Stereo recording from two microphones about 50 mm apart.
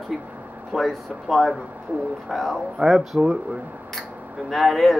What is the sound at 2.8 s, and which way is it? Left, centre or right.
Speech, centre.